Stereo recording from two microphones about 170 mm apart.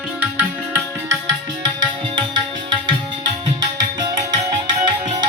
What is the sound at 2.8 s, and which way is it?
Tabla, 25° right (ahead or behind).